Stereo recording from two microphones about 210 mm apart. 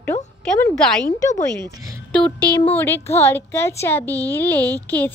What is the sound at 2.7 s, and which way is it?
A woman's voice, 10° left (ahead or behind).